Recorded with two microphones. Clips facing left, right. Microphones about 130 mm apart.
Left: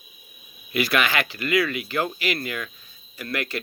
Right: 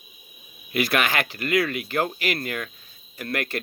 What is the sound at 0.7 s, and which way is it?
Speech, 50° right (ahead or behind).